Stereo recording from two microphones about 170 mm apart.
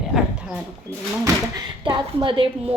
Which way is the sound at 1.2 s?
25° right (ahead or behind).